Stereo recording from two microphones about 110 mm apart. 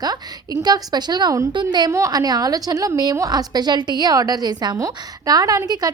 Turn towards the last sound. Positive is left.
turn(degrees=-35)  # may be behind; listen again after turning